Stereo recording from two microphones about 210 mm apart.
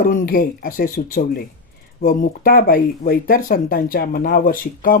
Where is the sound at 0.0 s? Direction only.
40° left (ahead or behind).